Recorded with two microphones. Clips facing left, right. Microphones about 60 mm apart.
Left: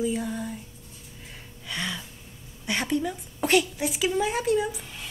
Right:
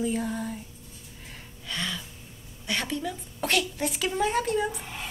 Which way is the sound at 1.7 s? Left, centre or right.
Centre.